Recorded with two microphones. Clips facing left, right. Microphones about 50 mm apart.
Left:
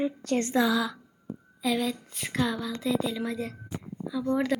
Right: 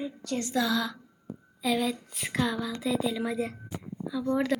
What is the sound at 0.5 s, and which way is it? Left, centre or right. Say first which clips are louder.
Speech: left 2 dB; centre.